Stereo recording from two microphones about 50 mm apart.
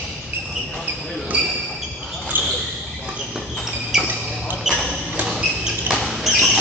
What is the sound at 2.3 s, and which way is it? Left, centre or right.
Basketball bounce, right.